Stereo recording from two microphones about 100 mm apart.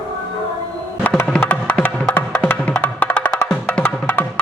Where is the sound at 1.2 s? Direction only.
10° left (ahead or behind).